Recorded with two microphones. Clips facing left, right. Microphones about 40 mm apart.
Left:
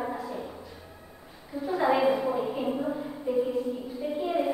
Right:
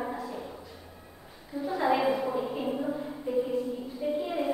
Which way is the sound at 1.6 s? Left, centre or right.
Centre.